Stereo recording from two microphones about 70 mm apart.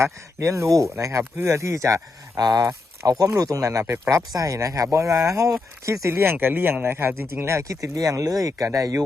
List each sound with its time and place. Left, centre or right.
0.0 s speech: right
2.4 s speech: right
3.3 s speech: right
6.1 s speech: right